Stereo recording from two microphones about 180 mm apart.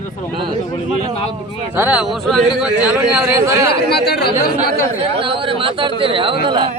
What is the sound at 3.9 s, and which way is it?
Speech, 65° left (ahead or behind).